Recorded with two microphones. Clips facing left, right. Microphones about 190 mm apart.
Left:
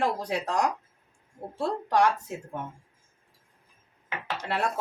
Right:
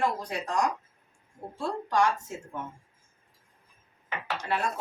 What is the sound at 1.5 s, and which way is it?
Speech, 65° left (ahead or behind).